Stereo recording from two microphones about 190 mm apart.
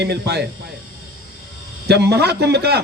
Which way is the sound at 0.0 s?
60° right (ahead or behind).